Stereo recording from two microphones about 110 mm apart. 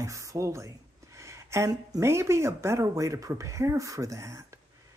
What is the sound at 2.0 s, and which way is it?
Speech, 25° right (ahead or behind).